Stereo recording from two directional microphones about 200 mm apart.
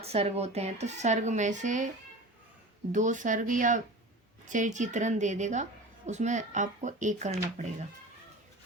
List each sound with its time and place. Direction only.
0.0 s speech: 30° right (ahead or behind)
2.9 s speech: 40° right (ahead or behind)